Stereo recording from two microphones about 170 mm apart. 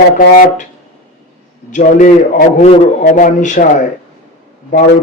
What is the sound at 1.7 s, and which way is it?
A man's voice, 45° left (ahead or behind).